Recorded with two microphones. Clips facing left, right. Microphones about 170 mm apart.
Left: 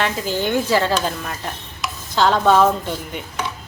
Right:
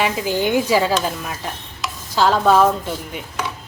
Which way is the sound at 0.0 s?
15° right (ahead or behind).